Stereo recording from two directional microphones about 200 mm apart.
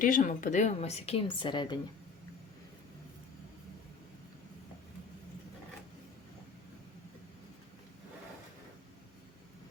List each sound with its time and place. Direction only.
0.0 s a woman's voice: 40° left (ahead or behind); by 1.8 s 25° left (ahead or behind)